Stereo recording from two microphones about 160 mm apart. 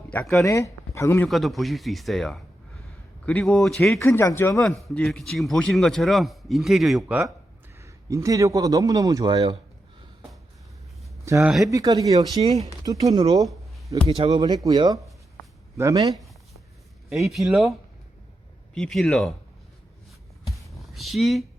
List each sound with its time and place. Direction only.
0.1 s speech: 10° left (ahead or behind)
0.4 s speech: 20° left (ahead or behind)
1.3 s a man's voice: centre (ahead or behind)
4.0 s speech: 15° left (ahead or behind)
4.6 s a man's voice: centre (ahead or behind)
7.8 s a man's voice: 20° right (ahead or behind)
11.3 s a man's voice: 20° right (ahead or behind)
17.1 s a man's voice: centre (ahead or behind)
18.7 s a man's voice: 5° left (ahead or behind)
20.6 s a sound: centre (ahead or behind)